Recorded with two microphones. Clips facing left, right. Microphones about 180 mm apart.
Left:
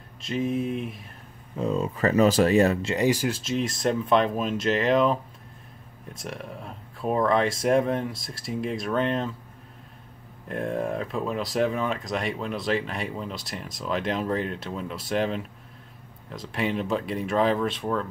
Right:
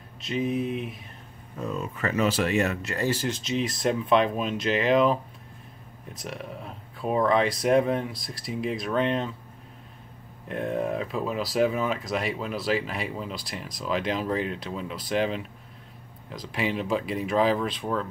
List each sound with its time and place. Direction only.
0.2 s speech: centre (ahead or behind)
1.6 s speech: 30° left (ahead or behind)
3.1 s speech: 10° left (ahead or behind)
6.2 s speech: centre (ahead or behind)
10.5 s speech: centre (ahead or behind)